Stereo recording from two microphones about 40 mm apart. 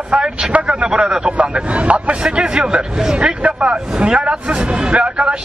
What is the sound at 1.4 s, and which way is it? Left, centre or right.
Speech, right.